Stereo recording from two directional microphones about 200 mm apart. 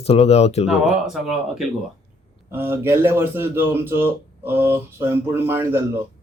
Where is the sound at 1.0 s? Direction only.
Centre (ahead or behind).